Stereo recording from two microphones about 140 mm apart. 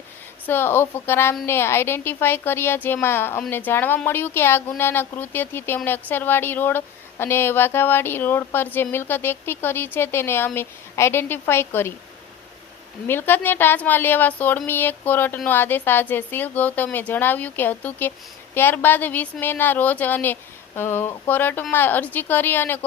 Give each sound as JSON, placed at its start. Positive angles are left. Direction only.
{"t": 0.4, "sound": "speech", "side_deg": 15}
{"t": 13.1, "sound": "speech", "side_deg": 15}